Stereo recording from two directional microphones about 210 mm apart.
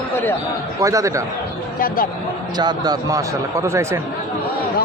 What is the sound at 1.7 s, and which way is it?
Speech, 45° left (ahead or behind).